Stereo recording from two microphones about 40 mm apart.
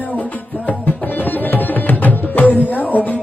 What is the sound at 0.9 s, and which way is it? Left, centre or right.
Music, left.